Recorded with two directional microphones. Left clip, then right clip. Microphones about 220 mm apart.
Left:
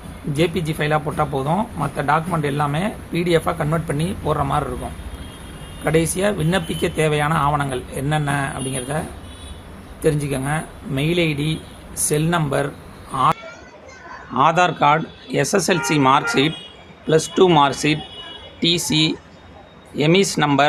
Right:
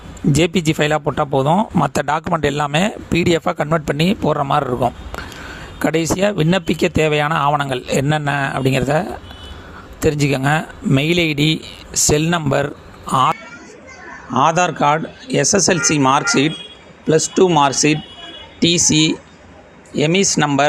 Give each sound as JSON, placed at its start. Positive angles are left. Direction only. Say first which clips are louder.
{"t": 0.3, "sound": "speech", "louder": "right 4 dB", "side_deg": -45}
{"t": 1.8, "sound": "speech", "louder": "right 2 dB", "side_deg": -50}
{"t": 5.8, "sound": "speech", "louder": "right 2 dB", "side_deg": -40}
{"t": 14.3, "sound": "speech", "louder": "right 1 dB", "side_deg": -25}